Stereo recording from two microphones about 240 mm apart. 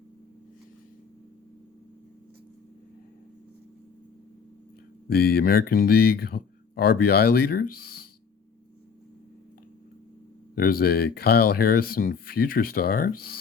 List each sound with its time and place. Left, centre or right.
5.0 s speech: left
10.5 s speech: left